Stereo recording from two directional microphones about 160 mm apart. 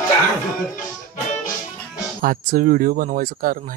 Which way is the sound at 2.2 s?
60° right (ahead or behind).